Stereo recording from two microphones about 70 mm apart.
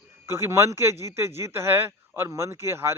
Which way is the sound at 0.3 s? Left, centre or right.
Right.